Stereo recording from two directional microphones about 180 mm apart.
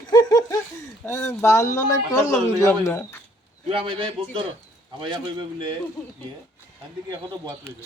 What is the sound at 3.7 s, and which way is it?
Speech, 30° right (ahead or behind).